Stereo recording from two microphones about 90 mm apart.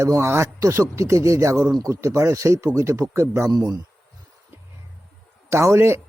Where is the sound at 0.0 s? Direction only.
30° right (ahead or behind).